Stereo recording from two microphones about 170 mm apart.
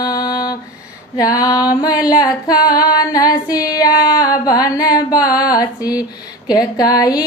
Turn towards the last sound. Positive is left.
turn(degrees=20)  # may be behind; listen again after turning